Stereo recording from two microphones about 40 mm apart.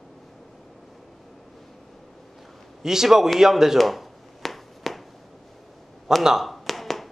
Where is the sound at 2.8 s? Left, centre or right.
Centre.